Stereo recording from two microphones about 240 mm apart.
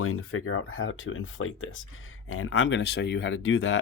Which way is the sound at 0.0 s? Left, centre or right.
Left.